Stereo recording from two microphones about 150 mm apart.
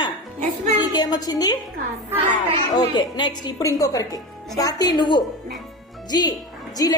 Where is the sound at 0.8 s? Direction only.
30° left (ahead or behind).